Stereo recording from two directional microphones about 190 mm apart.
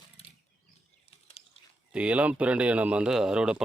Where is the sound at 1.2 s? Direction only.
30° left (ahead or behind).